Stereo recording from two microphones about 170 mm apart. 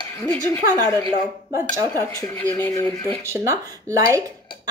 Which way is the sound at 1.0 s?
20° right (ahead or behind).